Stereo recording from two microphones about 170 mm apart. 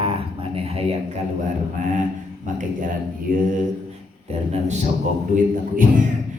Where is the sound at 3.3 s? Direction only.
55° right (ahead or behind).